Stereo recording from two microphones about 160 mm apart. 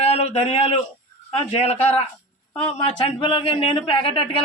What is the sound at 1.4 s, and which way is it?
Speech, 40° left (ahead or behind).